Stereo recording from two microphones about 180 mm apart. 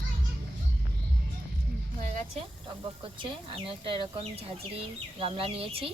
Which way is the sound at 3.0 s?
30° right (ahead or behind).